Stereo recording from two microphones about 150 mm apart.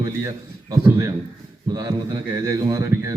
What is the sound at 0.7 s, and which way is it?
Speech, 20° right (ahead or behind).